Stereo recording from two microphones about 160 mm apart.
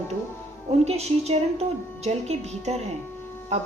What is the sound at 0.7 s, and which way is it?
A woman's voice, 40° right (ahead or behind).